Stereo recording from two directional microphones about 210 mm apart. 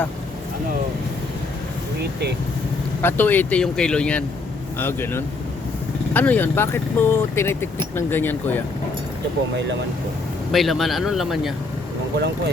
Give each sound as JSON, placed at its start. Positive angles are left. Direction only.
{"t": 3.0, "sound": "speech", "side_deg": 10}
{"t": 10.5, "sound": "speech", "side_deg": 0}